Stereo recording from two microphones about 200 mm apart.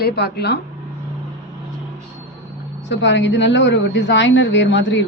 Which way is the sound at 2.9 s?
65° left (ahead or behind).